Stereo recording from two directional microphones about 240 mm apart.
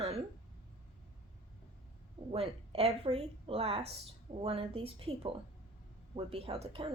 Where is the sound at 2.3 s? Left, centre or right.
Right.